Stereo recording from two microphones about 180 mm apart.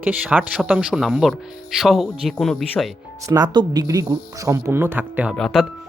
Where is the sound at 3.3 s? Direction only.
20° right (ahead or behind).